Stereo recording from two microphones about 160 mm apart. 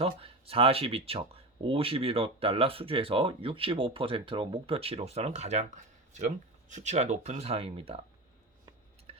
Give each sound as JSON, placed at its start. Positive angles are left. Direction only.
{"t": 0.0, "sound": "speech", "side_deg": -35}